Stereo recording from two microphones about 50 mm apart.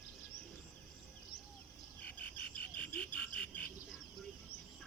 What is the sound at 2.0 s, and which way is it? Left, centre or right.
Frog, left.